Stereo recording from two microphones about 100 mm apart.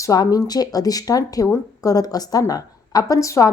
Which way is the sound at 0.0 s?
35° left (ahead or behind).